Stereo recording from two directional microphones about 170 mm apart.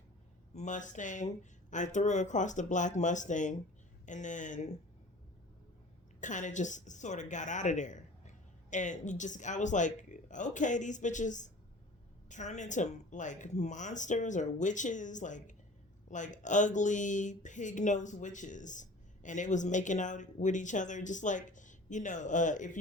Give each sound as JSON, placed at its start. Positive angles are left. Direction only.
{"t": 0.5, "sound": "speech", "side_deg": 45}
{"t": 6.1, "sound": "speech", "side_deg": 45}